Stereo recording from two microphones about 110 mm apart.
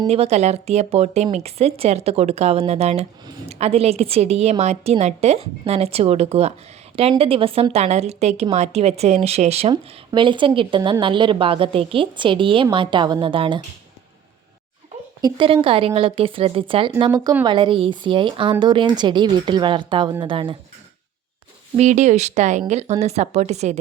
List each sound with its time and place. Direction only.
0.1 s a woman's voice: 75° right (ahead or behind)
7.2 s a woman's voice: 55° right (ahead or behind)
10.1 s a woman's voice: 50° right (ahead or behind)
15.2 s speech: 55° right (ahead or behind)
17.1 s speech: 30° right (ahead or behind)
17.4 s a woman's voice: 50° right (ahead or behind)
21.8 s speech: 90° right